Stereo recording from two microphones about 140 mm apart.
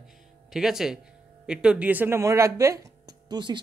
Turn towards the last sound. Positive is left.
turn(degrees=-30)  # may be behind; listen again after turning